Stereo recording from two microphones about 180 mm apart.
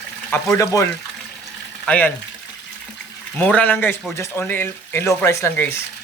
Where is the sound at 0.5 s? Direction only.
15° left (ahead or behind).